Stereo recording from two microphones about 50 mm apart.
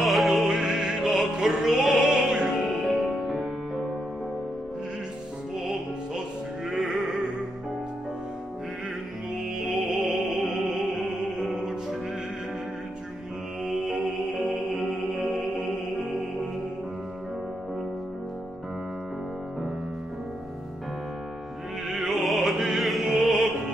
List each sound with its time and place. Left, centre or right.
0.0 s music: centre
6.7 s music: centre
9.6 s music: centre
10.0 s music: centre
10.5 s music: centre
13.7 s music: centre
21.9 s music: centre